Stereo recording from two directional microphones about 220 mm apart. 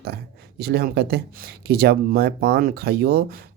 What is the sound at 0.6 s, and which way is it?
Speech, 45° right (ahead or behind).